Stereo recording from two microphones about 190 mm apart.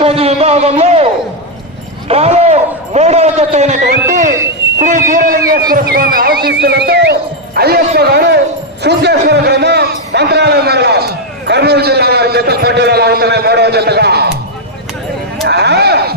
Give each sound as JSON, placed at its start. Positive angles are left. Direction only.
{"t": 0.0, "sound": "a man's voice", "side_deg": -30}
{"t": 2.0, "sound": "speech", "side_deg": -30}
{"t": 4.8, "sound": "a man's voice", "side_deg": -45}
{"t": 15.4, "sound": "a sound", "side_deg": -60}